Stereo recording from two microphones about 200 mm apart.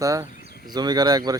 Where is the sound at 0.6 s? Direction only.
20° right (ahead or behind).